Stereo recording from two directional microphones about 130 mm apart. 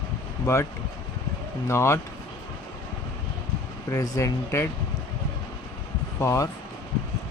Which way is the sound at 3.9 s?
25° left (ahead or behind).